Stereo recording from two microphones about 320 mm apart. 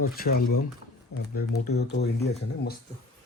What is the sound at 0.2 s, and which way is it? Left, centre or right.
Speech, left.